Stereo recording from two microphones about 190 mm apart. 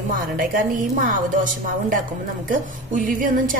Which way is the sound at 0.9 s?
45° right (ahead or behind).